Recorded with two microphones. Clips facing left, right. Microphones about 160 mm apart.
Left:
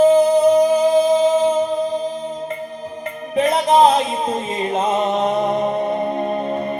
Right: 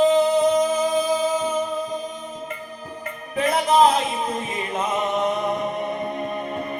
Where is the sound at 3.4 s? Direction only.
25° left (ahead or behind).